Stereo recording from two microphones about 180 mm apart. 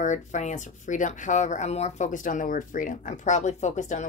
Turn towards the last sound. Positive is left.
turn(degrees=40)  # may be behind; listen again after turning